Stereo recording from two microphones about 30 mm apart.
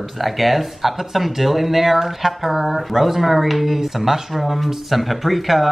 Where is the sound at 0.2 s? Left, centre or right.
Centre.